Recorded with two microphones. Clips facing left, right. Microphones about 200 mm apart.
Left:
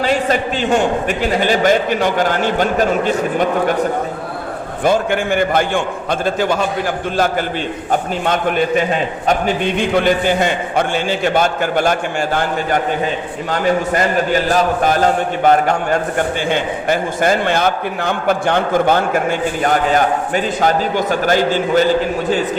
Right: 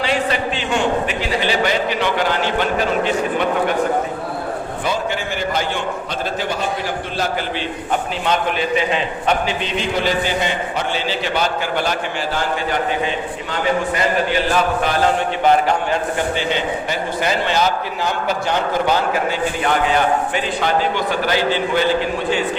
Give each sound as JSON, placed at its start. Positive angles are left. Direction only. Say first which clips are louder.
{"t": 0.0, "sound": "a man's voice", "louder": "left 3 dB", "side_deg": 45}
{"t": 4.8, "sound": "a man's voice", "louder": "left 9 dB", "side_deg": 50}
{"t": 8.2, "sound": "a man's voice", "louder": "left 3 dB", "side_deg": 50}